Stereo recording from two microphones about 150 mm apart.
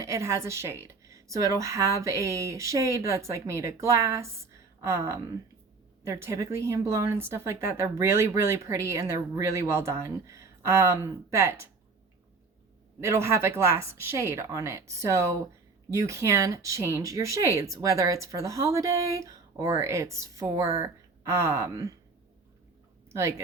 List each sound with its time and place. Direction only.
0.0 s speech: 20° right (ahead or behind)
13.0 s speech: 15° right (ahead or behind)
23.0 s speech: 15° right (ahead or behind)